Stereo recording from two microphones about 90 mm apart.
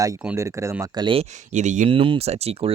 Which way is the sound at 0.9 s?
60° right (ahead or behind).